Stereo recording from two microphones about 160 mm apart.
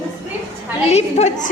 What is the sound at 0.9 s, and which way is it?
Speech, 45° left (ahead or behind).